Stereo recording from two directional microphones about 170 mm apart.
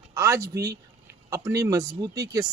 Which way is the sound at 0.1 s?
20° right (ahead or behind).